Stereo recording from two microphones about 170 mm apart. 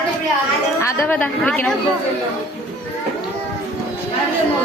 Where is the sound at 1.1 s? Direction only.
10° left (ahead or behind).